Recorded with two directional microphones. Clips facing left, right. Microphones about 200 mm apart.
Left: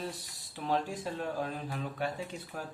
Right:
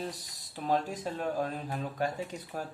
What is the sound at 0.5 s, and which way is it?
Speech, 40° right (ahead or behind).